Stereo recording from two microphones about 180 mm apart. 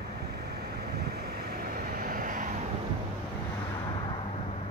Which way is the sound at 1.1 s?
60° right (ahead or behind).